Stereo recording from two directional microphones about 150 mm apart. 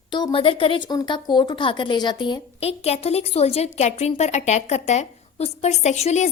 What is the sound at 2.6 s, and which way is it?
A woman's voice, 45° left (ahead or behind).